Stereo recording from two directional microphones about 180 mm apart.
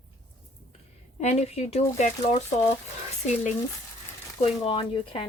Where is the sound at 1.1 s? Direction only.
40° left (ahead or behind).